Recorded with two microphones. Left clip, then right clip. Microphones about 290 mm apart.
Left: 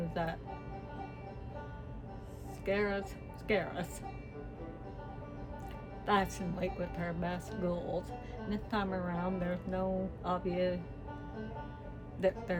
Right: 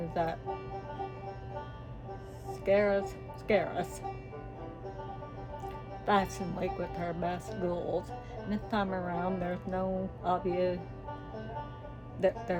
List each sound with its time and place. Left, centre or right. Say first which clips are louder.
0.1 s speech: right 6 dB; centre
2.5 s a woman's voice: right 7 dB; centre
6.1 s speech: right 3 dB; centre
12.2 s speech: right 3 dB; centre